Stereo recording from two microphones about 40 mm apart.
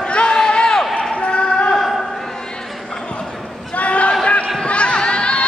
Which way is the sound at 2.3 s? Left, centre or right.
Centre.